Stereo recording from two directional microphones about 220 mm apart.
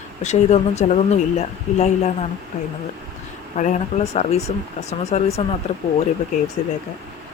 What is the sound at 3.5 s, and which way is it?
Speech, 35° left (ahead or behind).